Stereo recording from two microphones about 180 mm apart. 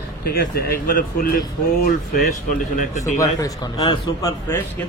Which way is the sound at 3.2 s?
20° left (ahead or behind).